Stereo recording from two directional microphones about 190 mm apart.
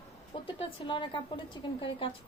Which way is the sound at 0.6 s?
25° left (ahead or behind).